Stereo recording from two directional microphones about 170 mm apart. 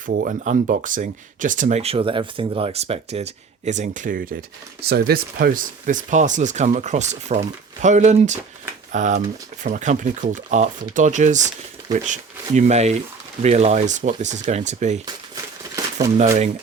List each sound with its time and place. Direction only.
0.0 s speech: 55° right (ahead or behind)